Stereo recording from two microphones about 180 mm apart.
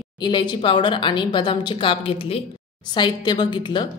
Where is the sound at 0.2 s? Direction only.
25° left (ahead or behind).